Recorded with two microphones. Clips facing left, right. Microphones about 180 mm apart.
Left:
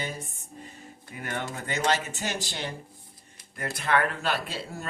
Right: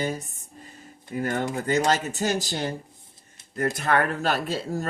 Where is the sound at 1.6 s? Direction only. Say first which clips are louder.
Right 4 dB; 40° right (ahead or behind).